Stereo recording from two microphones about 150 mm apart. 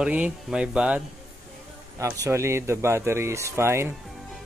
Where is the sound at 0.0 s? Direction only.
10° right (ahead or behind).